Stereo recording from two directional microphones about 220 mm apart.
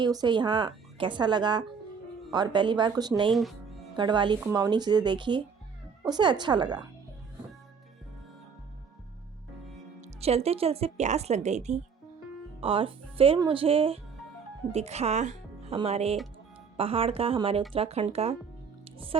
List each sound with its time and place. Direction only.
0.0 s speech: 20° right (ahead or behind)
3.3 s music: centre (ahead or behind)
3.9 s speech: 20° right (ahead or behind)
10.0 s speech: 30° right (ahead or behind)
18.9 s music: 25° right (ahead or behind)